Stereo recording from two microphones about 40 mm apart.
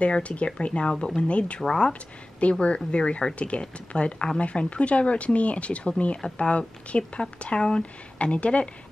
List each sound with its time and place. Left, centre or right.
0.0 s speech: left
2.6 s speech: left